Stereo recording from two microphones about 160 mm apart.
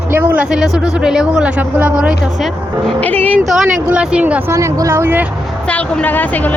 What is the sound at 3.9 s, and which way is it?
Speech, 5° right (ahead or behind).